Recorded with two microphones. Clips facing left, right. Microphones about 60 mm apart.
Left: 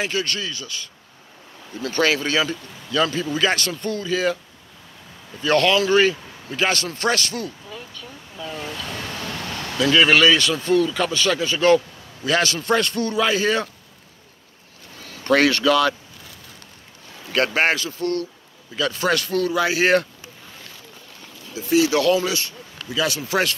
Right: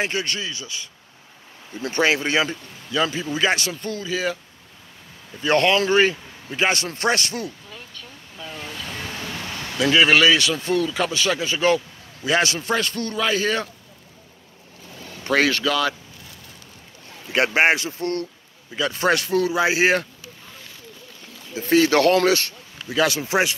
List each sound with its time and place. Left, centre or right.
0.0 s speech: right
3.8 s speech: centre
5.4 s speech: right
8.8 s vehicle: centre
9.8 s speech: centre
12.6 s speech: centre
15.2 s speech: centre
17.6 s speech: right
21.6 s speech: right
22.9 s speech: right